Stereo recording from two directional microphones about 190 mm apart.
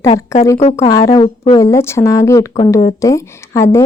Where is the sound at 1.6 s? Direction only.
15° left (ahead or behind).